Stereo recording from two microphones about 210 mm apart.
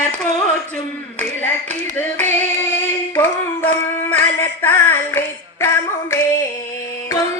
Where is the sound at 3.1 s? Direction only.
10° left (ahead or behind).